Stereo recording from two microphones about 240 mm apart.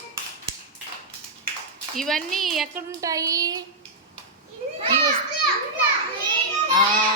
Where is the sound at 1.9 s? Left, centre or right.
Centre.